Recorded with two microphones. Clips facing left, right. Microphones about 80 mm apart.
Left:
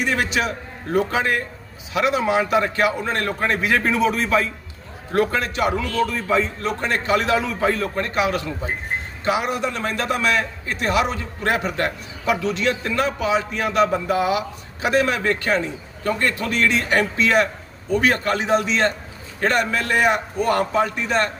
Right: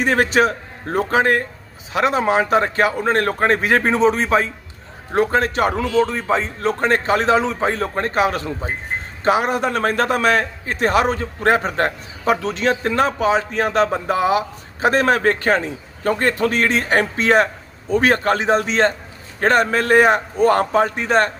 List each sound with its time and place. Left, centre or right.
0.0 s a man's voice: right
5.4 s a man's voice: right
6.1 s a man's voice: right